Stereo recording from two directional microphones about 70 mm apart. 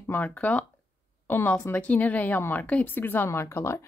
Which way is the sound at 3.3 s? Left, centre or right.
Left.